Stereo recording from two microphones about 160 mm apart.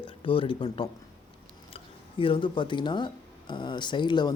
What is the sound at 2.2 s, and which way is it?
Speech, 30° left (ahead or behind).